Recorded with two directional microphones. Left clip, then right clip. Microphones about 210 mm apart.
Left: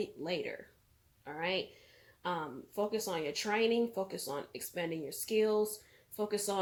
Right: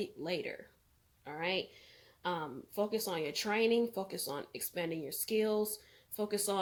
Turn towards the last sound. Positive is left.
turn(degrees=-35)  # may be behind; listen again after turning